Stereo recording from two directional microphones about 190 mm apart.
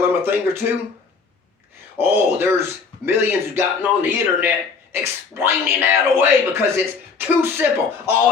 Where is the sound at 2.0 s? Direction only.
10° right (ahead or behind).